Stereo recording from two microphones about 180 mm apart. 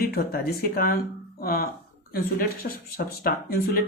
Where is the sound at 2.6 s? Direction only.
50° left (ahead or behind).